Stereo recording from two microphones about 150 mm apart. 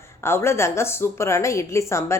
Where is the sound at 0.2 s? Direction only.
15° left (ahead or behind).